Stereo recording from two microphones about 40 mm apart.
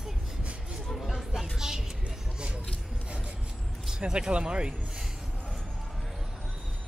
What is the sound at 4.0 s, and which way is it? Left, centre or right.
Speech, right.